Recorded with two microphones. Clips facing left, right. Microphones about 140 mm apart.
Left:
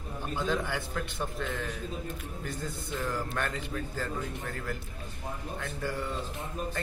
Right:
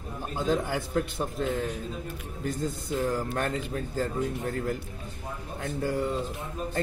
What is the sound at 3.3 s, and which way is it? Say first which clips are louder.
Speech: right 4 dB; 35° right (ahead or behind).